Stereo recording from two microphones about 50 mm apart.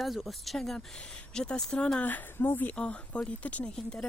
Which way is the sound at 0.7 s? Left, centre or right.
Centre.